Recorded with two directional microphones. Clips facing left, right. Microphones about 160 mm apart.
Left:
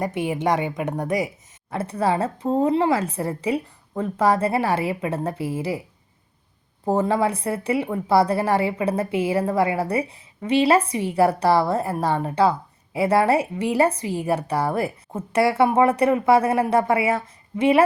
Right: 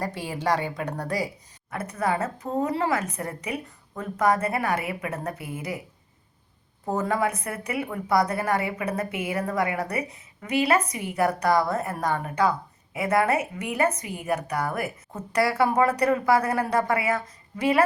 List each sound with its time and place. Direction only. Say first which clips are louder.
0.0 s a woman's voice: left 5 dB; 20° left (ahead or behind)
6.8 s a woman's voice: left 5 dB; 30° left (ahead or behind)